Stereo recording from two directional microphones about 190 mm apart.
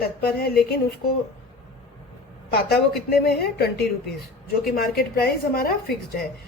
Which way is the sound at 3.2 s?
55° left (ahead or behind).